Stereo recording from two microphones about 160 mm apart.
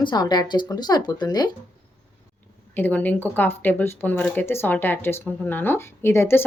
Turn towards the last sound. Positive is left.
turn(degrees=15)  # may be behind; listen again after turning